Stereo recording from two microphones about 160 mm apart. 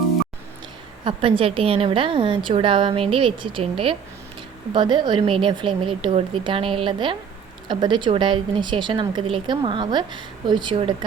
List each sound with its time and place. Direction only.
1.0 s a woman's voice: 35° right (ahead or behind)